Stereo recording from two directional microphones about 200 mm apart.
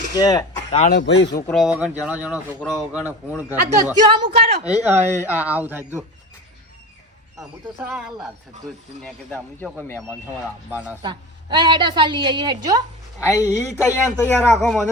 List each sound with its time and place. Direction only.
0.1 s speech: 20° left (ahead or behind)
0.9 s speech: 65° left (ahead or behind)
1.5 s speech: centre (ahead or behind)
3.1 s speech: 10° right (ahead or behind)
4.0 s a woman's voice: 25° right (ahead or behind)
4.7 s speech: 10° right (ahead or behind)
7.9 s speech: 5° right (ahead or behind)
10.1 s speech: 10° right (ahead or behind)
11.0 s a woman's voice: 25° right (ahead or behind)
13.2 s speech: 15° left (ahead or behind)